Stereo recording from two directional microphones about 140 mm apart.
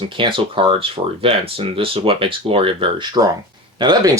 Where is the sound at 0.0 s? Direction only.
35° right (ahead or behind).